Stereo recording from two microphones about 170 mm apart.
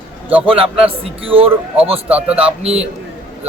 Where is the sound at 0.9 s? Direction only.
35° right (ahead or behind).